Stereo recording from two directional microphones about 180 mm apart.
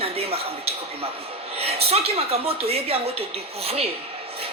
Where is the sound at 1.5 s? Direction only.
35° right (ahead or behind).